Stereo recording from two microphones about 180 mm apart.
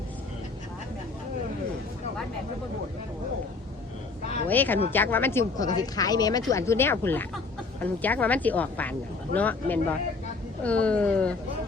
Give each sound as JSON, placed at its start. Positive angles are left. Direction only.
{"t": 4.4, "sound": "speech", "side_deg": 10}